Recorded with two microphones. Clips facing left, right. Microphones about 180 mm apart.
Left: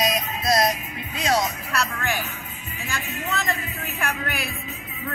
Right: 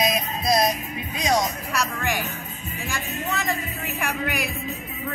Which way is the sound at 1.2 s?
15° right (ahead or behind).